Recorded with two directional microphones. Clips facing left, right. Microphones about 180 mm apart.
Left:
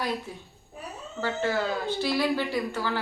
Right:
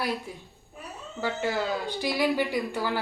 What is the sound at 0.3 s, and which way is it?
A woman's voice, 15° right (ahead or behind).